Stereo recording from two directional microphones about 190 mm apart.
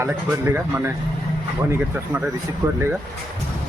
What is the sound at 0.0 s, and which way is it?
Speech, 10° right (ahead or behind).